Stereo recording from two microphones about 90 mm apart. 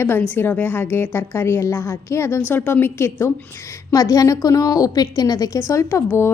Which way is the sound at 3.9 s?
40° left (ahead or behind).